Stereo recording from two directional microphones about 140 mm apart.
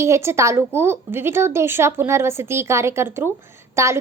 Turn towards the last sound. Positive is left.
turn(degrees=-20)  # may be behind; listen again after turning